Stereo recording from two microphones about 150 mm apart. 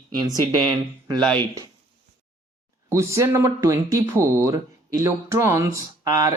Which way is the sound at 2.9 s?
20° right (ahead or behind).